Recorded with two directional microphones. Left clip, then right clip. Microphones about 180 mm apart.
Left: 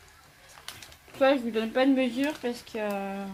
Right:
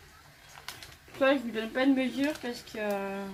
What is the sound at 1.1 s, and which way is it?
Speech, 50° left (ahead or behind).